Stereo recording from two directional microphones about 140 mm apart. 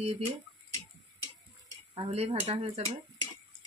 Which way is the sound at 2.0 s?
45° right (ahead or behind).